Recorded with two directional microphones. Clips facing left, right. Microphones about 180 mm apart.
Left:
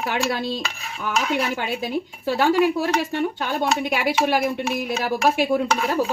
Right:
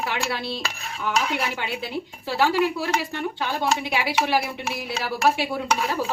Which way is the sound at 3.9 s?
50° left (ahead or behind).